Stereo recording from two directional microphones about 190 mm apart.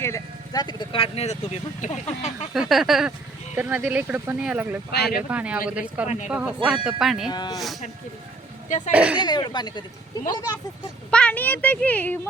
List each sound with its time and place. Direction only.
0.0 s speech: 15° left (ahead or behind); by 2.3 s 35° left (ahead or behind)
2.5 s speech: centre (ahead or behind)
4.9 s speech: 60° left (ahead or behind)
5.3 s speech: 5° right (ahead or behind)
7.3 s speech: 20° left (ahead or behind)
8.9 s speech: 5° right (ahead or behind)
9.2 s speech: 25° left (ahead or behind)
11.1 s speech: 5° left (ahead or behind)